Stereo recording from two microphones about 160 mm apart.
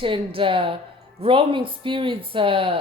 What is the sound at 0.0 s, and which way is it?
Speech, 35° right (ahead or behind).